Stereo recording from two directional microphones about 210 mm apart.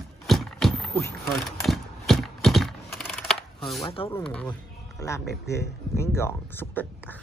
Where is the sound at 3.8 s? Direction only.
25° left (ahead or behind).